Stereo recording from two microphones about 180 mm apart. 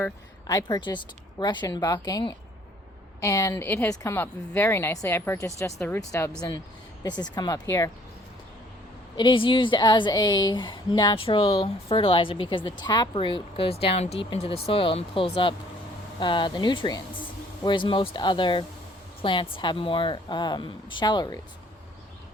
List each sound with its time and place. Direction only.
0.4 s a woman's voice: 20° left (ahead or behind)
9.1 s a woman's voice: 25° left (ahead or behind)